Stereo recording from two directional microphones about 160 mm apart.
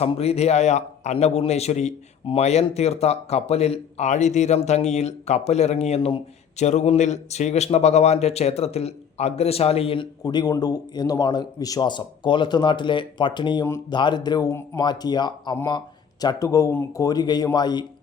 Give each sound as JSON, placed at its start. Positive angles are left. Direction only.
{"t": 0.0, "sound": "a man's voice", "side_deg": 40}
{"t": 6.7, "sound": "a man's voice", "side_deg": 45}